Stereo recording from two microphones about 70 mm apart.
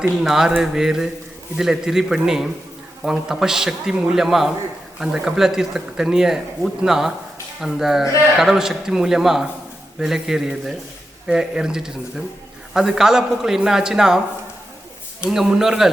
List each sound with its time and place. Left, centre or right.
0.2 s speech: centre
15.3 s speech: centre